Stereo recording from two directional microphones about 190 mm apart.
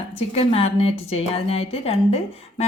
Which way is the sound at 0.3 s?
30° left (ahead or behind).